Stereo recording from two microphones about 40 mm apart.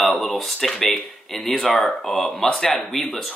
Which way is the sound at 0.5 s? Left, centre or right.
Centre.